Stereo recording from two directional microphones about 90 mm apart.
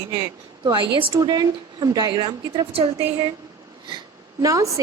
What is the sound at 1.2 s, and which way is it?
Speech, 45° right (ahead or behind).